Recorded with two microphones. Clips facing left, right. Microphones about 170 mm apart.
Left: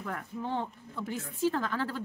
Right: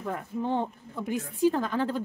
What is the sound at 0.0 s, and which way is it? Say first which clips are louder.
Speech: right 5 dB; 20° right (ahead or behind).